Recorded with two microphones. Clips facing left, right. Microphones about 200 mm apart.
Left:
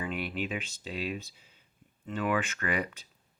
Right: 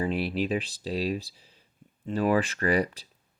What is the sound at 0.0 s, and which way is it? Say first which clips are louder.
Speech: right 7 dB; 35° right (ahead or behind).